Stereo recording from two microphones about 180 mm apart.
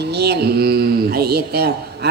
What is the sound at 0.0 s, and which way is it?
Speech, 65° right (ahead or behind).